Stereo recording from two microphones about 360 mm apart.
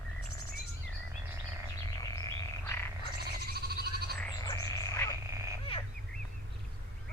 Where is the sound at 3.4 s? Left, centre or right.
Right.